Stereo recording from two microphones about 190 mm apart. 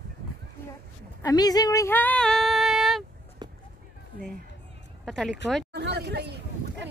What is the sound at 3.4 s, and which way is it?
Run, 20° right (ahead or behind).